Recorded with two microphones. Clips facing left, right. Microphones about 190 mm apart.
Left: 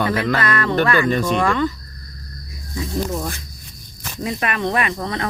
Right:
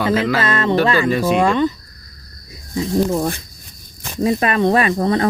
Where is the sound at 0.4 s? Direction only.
25° right (ahead or behind).